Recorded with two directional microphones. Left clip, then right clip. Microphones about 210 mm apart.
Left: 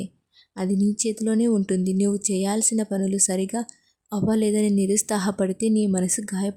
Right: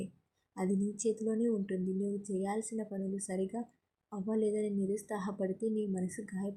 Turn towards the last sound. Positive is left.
turn(degrees=30)  # may be behind; listen again after turning